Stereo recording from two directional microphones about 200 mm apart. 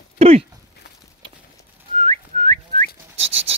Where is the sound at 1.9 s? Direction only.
30° right (ahead or behind).